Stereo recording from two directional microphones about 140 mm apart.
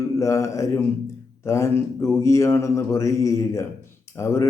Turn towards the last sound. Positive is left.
turn(degrees=20)  # may be behind; listen again after turning